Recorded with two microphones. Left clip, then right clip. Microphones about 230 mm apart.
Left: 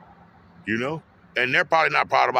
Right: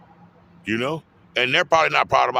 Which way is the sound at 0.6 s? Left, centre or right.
Centre.